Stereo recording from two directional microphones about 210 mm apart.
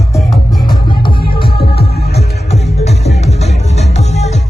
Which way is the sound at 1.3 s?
45° left (ahead or behind).